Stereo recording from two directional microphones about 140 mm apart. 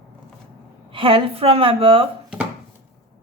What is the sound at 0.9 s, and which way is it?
A woman's voice, 40° right (ahead or behind).